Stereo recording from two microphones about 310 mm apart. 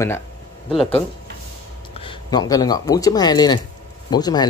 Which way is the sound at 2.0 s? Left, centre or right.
Centre.